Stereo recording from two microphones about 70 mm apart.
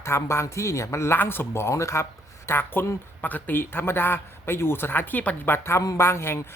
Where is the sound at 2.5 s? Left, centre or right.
Left.